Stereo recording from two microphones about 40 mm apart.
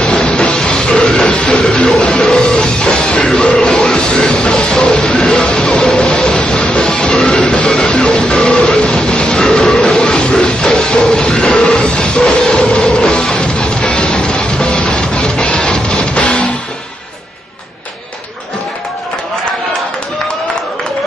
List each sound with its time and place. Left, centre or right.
0.0 s music: centre
2.0 s music: centre
2.4 s music: left
7.6 s music: centre
9.4 s music: centre
10.6 s music: centre
12.3 s train: centre
12.9 s music: centre